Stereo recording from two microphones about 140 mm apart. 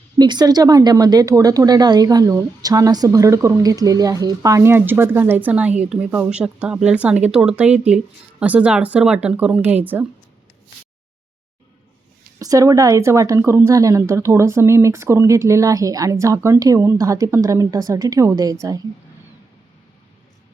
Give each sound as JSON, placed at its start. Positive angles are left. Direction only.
{"t": 0.2, "sound": "a woman's voice", "side_deg": -30}
{"t": 12.4, "sound": "speech", "side_deg": -25}